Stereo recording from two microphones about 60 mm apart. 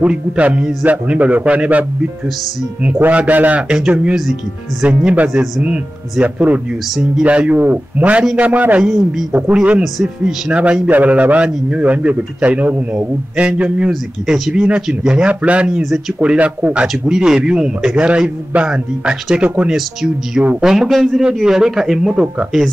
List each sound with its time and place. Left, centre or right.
0.0 s a man's voice: right
3.0 s a man's voice: right
17.1 s a man's voice: centre
19.7 s a man's voice: centre